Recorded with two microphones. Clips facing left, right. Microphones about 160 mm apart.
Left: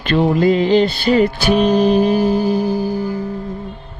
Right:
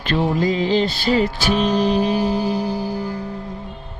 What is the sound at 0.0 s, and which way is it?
Music, 65° left (ahead or behind).